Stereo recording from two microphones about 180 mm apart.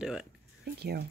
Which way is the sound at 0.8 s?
65° right (ahead or behind).